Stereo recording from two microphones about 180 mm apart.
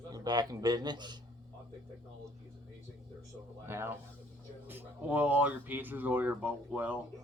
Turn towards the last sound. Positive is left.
turn(degrees=-10)  # may be behind; listen again after turning